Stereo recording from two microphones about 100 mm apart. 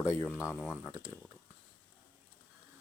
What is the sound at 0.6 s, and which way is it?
Speech, 5° left (ahead or behind).